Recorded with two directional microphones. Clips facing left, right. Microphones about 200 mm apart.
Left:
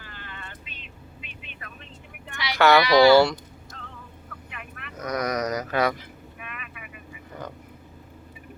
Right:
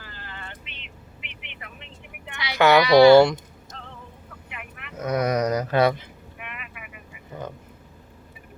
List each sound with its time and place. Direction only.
0.0 s vehicle: 30° right (ahead or behind)
1.2 s vehicle: 20° right (ahead or behind)
2.6 s speech: 15° right (ahead or behind)
4.5 s vehicle: 15° right (ahead or behind)
4.9 s vehicle: 25° right (ahead or behind)